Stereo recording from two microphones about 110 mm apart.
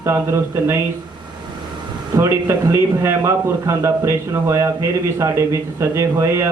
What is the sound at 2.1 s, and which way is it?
A man's voice, 25° right (ahead or behind).